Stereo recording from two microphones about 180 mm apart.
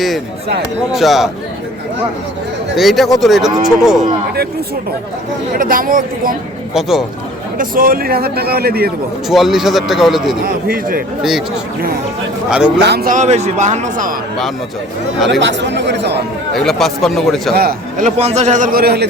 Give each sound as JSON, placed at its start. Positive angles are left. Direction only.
{"t": 0.9, "sound": "a man's voice", "side_deg": 0}
{"t": 2.7, "sound": "a man's voice", "side_deg": 0}
{"t": 5.5, "sound": "a man's voice", "side_deg": -50}
{"t": 6.7, "sound": "a man's voice", "side_deg": 0}
{"t": 7.6, "sound": "a man's voice", "side_deg": -50}
{"t": 9.3, "sound": "a man's voice", "side_deg": 0}
{"t": 10.4, "sound": "a man's voice", "side_deg": -50}
{"t": 11.2, "sound": "a man's voice", "side_deg": 0}
{"t": 12.5, "sound": "a man's voice", "side_deg": -5}
{"t": 12.8, "sound": "a man's voice", "side_deg": -60}
{"t": 15.3, "sound": "speech", "side_deg": -80}
{"t": 16.6, "sound": "a man's voice", "side_deg": 0}
{"t": 17.5, "sound": "a man's voice", "side_deg": -60}